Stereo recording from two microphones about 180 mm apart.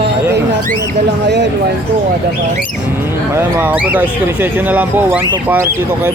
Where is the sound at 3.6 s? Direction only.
10° right (ahead or behind).